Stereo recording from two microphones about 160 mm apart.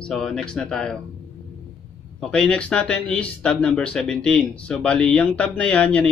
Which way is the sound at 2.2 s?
5° left (ahead or behind).